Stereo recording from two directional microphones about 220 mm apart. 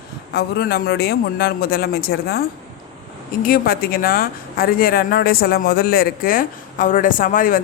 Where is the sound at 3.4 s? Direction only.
40° left (ahead or behind).